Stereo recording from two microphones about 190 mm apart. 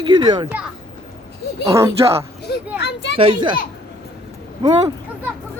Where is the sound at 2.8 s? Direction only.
65° left (ahead or behind).